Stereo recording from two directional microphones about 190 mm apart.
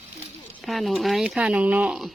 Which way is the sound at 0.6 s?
Centre (ahead or behind).